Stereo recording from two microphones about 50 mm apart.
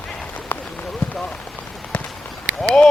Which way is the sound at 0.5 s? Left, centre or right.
Left.